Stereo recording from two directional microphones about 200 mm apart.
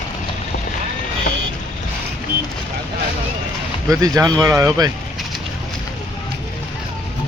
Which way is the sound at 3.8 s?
15° right (ahead or behind).